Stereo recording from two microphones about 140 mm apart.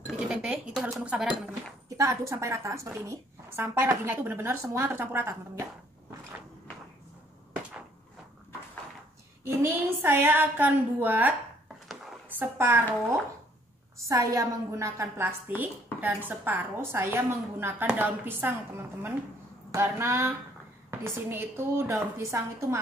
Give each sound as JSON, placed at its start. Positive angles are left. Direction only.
{"t": 0.3, "sound": "dishes", "side_deg": -5}
{"t": 2.0, "sound": "a woman's voice", "side_deg": -20}
{"t": 9.4, "sound": "a woman's voice", "side_deg": -15}
{"t": 14.0, "sound": "a woman's voice", "side_deg": -20}